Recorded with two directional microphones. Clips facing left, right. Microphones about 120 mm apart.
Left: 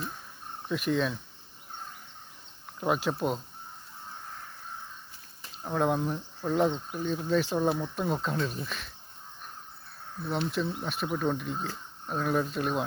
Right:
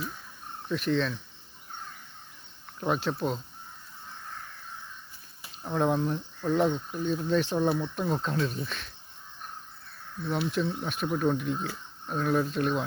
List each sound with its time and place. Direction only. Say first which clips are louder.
0.7 s speech: right 1 dB; 10° left (ahead or behind)
2.8 s speech: even; 5° left (ahead or behind)
5.6 s speech: right 1 dB; centre (ahead or behind)
6.7 s speech: right 1 dB; 20° left (ahead or behind)
7.0 s speech: right 1 dB; centre (ahead or behind)
10.5 s speech: right 2 dB; centre (ahead or behind)